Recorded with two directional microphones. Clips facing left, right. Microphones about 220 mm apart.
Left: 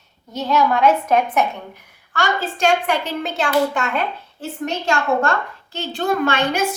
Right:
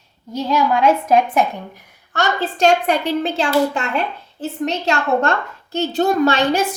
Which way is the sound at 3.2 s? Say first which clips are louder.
Left 1 dB; 30° right (ahead or behind).